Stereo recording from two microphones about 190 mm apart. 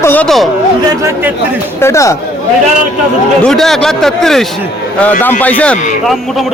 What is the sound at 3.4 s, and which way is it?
A man's voice, centre (ahead or behind).